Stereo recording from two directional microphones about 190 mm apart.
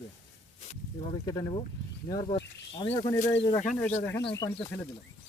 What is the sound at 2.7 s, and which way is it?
Speech, 20° left (ahead or behind).